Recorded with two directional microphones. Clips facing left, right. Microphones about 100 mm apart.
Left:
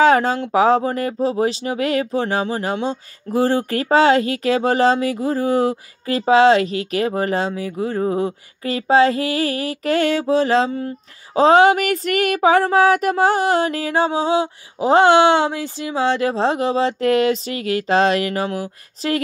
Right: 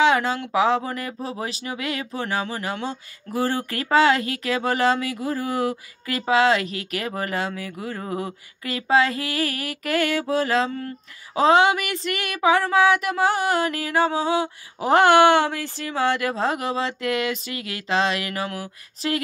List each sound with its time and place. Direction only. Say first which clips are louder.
0.0 s speech: left 5 dB; 40° left (ahead or behind); by 11.0 s 20° left (ahead or behind)
11.3 s speech: left 5 dB; 35° left (ahead or behind)